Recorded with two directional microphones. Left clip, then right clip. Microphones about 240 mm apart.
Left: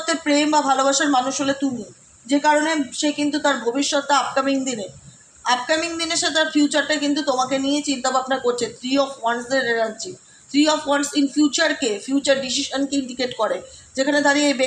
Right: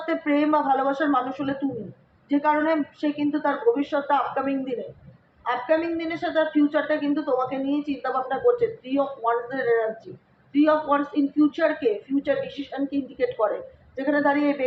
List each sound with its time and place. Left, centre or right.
0.0 s a woman's voice: left